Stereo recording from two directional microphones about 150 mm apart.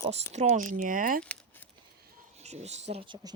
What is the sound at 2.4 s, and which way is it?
Speech, 50° right (ahead or behind).